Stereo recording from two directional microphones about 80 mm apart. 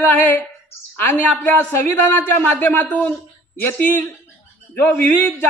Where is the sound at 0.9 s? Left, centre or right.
Left.